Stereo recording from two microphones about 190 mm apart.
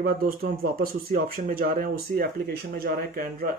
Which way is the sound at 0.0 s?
50° right (ahead or behind).